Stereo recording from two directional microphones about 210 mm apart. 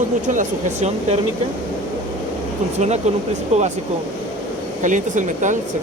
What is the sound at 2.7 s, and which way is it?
Speech, 35° right (ahead or behind).